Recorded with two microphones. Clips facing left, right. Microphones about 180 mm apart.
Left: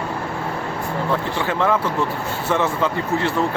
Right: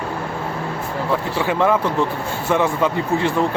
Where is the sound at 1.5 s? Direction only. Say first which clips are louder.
Right 3 dB; 15° right (ahead or behind).